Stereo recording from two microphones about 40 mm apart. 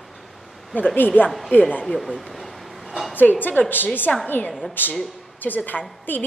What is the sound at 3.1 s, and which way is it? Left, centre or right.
Speech, left.